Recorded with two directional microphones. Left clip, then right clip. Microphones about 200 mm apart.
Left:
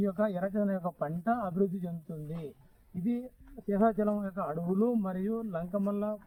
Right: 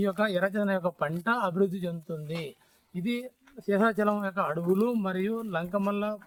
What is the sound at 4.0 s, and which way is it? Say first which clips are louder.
Speech: right 4 dB; 35° right (ahead or behind).